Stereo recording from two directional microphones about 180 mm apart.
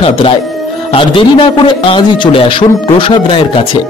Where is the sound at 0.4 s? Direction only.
Centre (ahead or behind).